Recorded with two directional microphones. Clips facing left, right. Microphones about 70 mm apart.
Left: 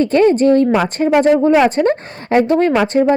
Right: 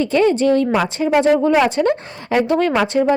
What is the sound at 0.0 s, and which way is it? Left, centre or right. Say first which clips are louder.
A woman's voice: left 4 dB; left.